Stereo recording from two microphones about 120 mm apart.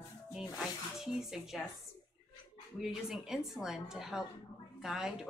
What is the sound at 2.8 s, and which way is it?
A woman's voice, 5° right (ahead or behind).